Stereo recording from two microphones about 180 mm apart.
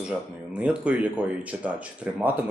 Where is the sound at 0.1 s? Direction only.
5° right (ahead or behind).